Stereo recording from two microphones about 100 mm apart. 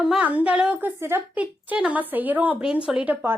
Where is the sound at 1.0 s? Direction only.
25° right (ahead or behind).